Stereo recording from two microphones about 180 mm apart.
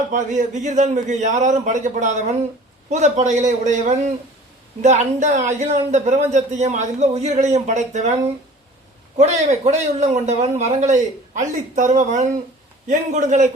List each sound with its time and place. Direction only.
0.1 s a man's voice: 45° right (ahead or behind)